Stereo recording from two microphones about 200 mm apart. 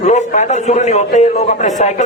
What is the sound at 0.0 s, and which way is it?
A man's voice, 35° left (ahead or behind).